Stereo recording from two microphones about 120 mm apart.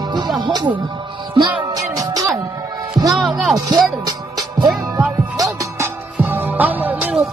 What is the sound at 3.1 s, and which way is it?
Music, centre (ahead or behind).